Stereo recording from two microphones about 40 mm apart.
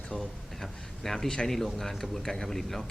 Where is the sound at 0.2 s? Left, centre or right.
Centre.